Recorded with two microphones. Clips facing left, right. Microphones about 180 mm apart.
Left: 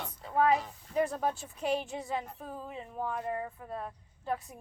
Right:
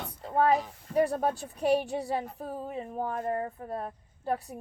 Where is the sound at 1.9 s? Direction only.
35° right (ahead or behind).